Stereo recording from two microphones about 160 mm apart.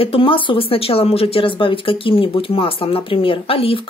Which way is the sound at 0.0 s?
35° left (ahead or behind).